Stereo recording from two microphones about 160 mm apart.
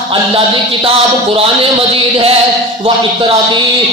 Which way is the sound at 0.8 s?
35° right (ahead or behind).